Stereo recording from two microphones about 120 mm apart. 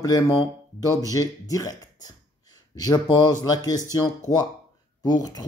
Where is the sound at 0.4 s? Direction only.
25° right (ahead or behind).